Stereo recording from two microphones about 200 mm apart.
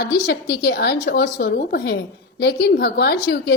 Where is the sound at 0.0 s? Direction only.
55° left (ahead or behind).